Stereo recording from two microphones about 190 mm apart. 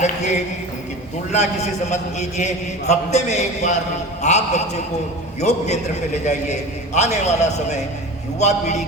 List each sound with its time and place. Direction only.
0.0 s speech: 35° left (ahead or behind)
1.9 s a man's voice: 35° left (ahead or behind)